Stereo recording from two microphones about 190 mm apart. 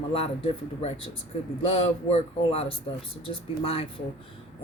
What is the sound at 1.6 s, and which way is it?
A man's voice, 30° left (ahead or behind).